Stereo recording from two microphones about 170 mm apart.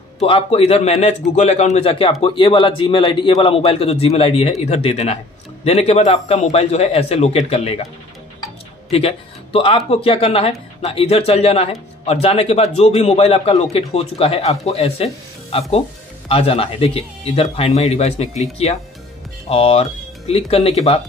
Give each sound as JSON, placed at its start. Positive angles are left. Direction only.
{"t": 0.2, "sound": "a man's voice", "side_deg": 35}
{"t": 8.9, "sound": "a man's voice", "side_deg": 35}
{"t": 16.3, "sound": "a man's voice", "side_deg": 35}